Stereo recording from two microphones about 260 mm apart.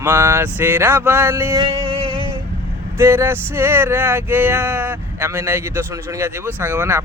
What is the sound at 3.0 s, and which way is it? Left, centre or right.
Speech, centre.